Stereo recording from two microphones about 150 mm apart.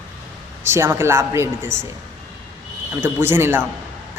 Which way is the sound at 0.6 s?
15° right (ahead or behind).